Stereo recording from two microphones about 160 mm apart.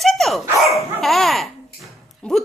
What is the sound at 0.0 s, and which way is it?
Dog, centre (ahead or behind).